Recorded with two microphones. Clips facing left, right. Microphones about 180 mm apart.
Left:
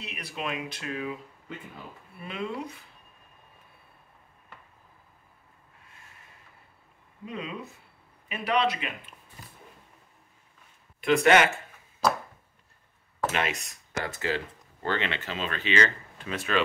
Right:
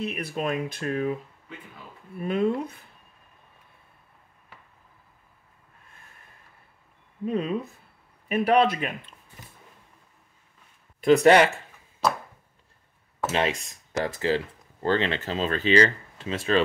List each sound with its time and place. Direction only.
0.0 s speech: 50° right (ahead or behind)
2.2 s speech: 50° right (ahead or behind)
7.2 s speech: 45° right (ahead or behind)
11.2 s speech: 35° right (ahead or behind)
13.3 s speech: 30° right (ahead or behind)